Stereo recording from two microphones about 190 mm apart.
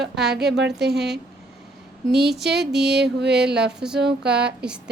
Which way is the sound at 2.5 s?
60° right (ahead or behind).